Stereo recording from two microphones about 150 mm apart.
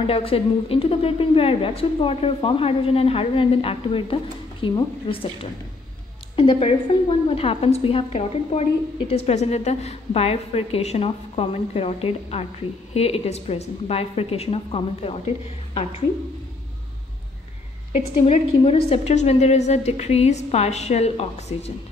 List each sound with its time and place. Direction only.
0.0 s a woman's voice: 40° left (ahead or behind)
18.2 s a woman's voice: 40° left (ahead or behind)